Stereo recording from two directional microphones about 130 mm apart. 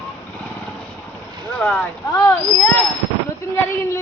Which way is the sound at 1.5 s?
10° left (ahead or behind).